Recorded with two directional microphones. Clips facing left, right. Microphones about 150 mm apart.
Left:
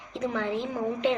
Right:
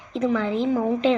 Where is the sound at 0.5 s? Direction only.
90° right.